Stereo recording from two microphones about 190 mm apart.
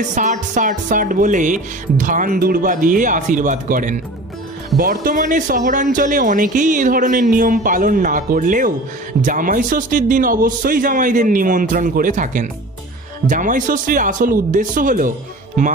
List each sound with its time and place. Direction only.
0.1 s speech: 40° right (ahead or behind)